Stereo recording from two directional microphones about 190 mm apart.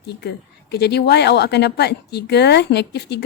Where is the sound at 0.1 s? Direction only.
60° left (ahead or behind).